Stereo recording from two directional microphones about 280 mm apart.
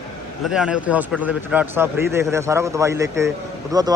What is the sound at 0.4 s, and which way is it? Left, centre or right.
A man's voice, centre.